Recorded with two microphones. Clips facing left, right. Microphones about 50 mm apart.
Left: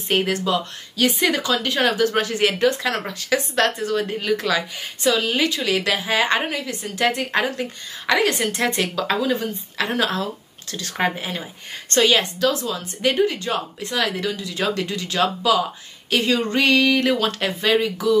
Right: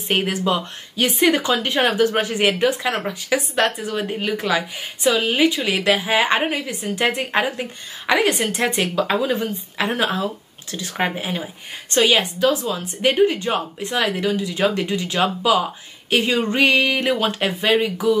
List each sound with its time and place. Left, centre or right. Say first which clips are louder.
0.1 s a woman's voice: even; centre